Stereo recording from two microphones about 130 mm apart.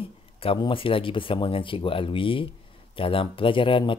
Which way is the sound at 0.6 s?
40° left (ahead or behind).